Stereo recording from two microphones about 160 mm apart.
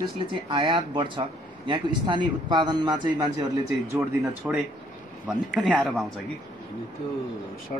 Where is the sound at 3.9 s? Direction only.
15° right (ahead or behind).